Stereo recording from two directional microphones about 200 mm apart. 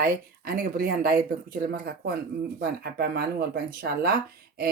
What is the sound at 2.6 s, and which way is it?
Speech, 50° right (ahead or behind).